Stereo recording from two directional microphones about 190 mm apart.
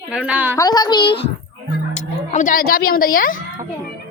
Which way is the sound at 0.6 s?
20° left (ahead or behind).